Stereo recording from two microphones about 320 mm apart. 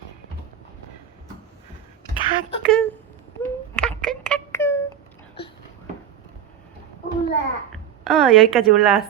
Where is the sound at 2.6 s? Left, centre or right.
Centre.